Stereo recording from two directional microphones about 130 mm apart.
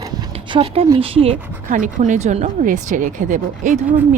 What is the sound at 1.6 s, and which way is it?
Speech, 90° right.